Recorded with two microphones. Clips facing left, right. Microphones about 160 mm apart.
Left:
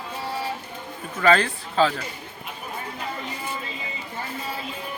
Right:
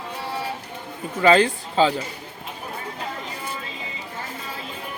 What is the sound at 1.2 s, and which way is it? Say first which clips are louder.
Speech: right 3 dB; 25° right (ahead or behind).